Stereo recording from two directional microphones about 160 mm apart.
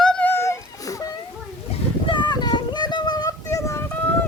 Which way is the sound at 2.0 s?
30° left (ahead or behind).